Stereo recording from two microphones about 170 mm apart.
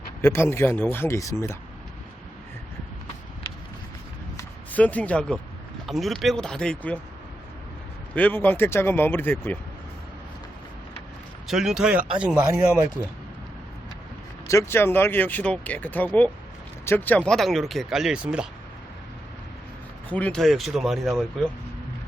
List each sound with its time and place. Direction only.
0.2 s speech: 15° left (ahead or behind)
4.4 s a sound: 10° left (ahead or behind)
5.8 s speech: centre (ahead or behind)
8.1 s speech: 10° left (ahead or behind)
11.4 s speech: centre (ahead or behind)
14.4 s speech: 15° left (ahead or behind); by 18.4 s 5° right (ahead or behind)
20.1 s speech: 10° left (ahead or behind)